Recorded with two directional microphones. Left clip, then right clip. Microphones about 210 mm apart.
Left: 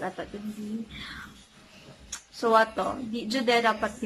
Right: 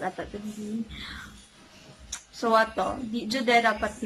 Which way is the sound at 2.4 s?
Centre (ahead or behind).